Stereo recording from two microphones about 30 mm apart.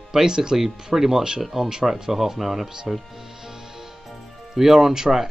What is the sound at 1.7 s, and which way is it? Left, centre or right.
Speech, centre.